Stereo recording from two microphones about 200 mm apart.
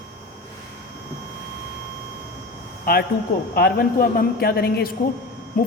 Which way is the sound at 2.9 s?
45° left (ahead or behind).